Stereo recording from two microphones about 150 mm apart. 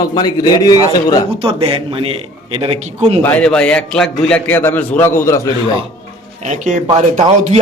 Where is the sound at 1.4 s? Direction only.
35° right (ahead or behind).